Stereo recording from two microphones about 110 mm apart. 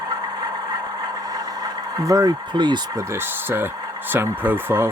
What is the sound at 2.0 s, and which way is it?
Speech, 35° right (ahead or behind).